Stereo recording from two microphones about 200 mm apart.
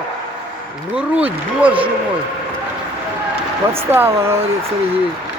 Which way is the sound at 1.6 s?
25° right (ahead or behind).